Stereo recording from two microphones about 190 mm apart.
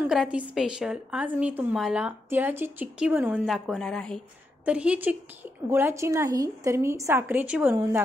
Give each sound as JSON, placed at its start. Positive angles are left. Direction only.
{"t": 0.0, "sound": "a woman's voice", "side_deg": -5}